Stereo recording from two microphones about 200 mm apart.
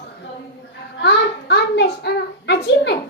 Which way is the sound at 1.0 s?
55° left (ahead or behind).